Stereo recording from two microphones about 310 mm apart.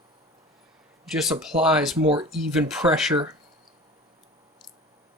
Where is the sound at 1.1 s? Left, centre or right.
Centre.